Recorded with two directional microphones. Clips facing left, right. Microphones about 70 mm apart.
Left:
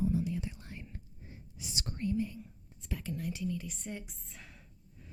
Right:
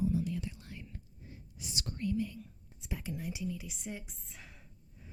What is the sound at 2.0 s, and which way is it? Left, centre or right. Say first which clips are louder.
Speech: left 1 dB; left.